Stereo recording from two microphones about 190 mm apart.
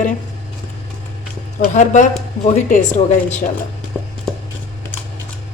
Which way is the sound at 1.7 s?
40° left (ahead or behind).